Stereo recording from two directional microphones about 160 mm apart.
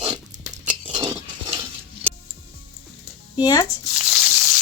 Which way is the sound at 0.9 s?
25° right (ahead or behind).